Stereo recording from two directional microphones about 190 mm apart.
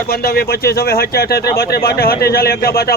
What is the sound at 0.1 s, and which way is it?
Speech, 55° left (ahead or behind).